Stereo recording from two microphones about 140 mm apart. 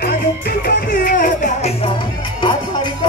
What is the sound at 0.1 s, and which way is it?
Music, 90° left.